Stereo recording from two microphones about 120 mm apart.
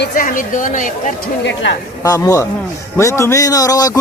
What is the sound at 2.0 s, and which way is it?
Speech, 30° left (ahead or behind).